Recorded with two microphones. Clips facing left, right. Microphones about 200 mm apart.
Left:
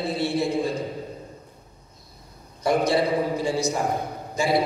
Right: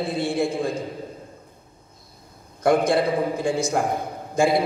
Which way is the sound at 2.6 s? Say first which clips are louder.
Right 2 dB; 50° right (ahead or behind).